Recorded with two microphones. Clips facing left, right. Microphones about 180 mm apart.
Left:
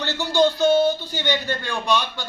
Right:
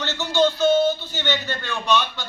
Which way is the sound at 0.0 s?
15° left (ahead or behind).